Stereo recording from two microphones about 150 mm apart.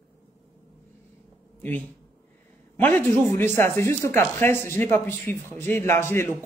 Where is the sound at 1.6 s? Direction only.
10° left (ahead or behind).